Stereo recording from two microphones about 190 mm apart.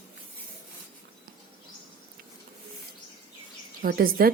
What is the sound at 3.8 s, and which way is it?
Speech, 50° right (ahead or behind).